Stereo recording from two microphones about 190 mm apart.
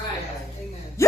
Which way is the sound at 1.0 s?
15° left (ahead or behind).